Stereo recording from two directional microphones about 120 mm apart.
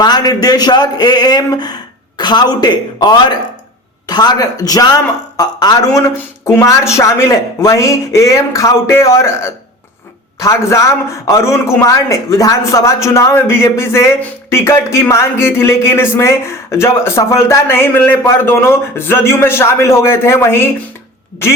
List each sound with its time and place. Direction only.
0.0 s a man's voice: 35° left (ahead or behind)